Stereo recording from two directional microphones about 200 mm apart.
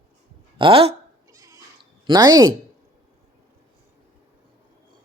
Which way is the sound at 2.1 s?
20° right (ahead or behind).